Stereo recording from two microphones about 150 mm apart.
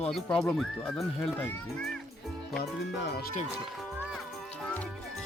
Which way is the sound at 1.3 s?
15° left (ahead or behind).